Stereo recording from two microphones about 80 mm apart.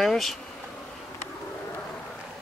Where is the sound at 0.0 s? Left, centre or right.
Centre.